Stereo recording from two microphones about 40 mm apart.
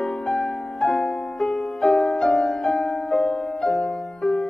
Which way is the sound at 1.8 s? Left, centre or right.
Centre.